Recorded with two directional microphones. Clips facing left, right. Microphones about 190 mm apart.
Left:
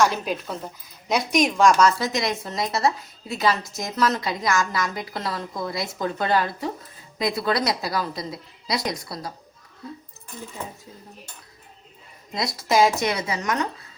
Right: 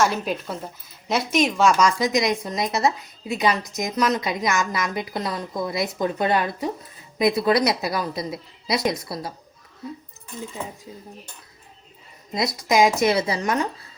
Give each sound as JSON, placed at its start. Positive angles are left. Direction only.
{"t": 0.0, "sound": "a woman's voice", "side_deg": -5}
{"t": 12.5, "sound": "a woman's voice", "side_deg": -20}